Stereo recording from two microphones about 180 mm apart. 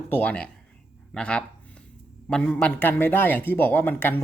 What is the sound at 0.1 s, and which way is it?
Speech, 10° left (ahead or behind).